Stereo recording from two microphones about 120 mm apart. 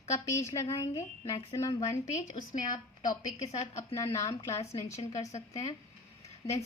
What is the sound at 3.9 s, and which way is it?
A woman's voice, 25° left (ahead or behind).